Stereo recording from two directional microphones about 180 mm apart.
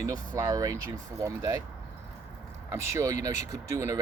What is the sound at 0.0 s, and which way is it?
Speech, 20° right (ahead or behind).